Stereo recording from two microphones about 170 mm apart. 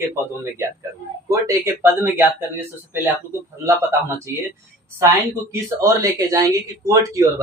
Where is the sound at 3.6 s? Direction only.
15° right (ahead or behind).